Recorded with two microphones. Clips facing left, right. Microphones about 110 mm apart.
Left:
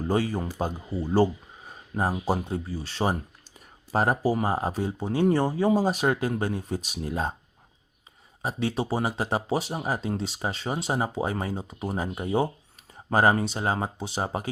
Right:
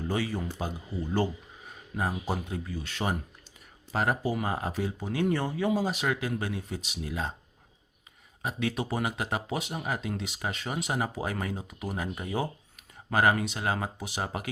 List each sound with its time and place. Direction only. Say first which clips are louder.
0.1 s speech: left 6 dB; 40° left (ahead or behind)
8.4 s speech: left 3 dB; 35° left (ahead or behind)